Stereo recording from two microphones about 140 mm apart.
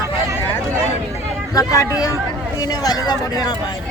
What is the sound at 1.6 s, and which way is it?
Speech, 25° left (ahead or behind).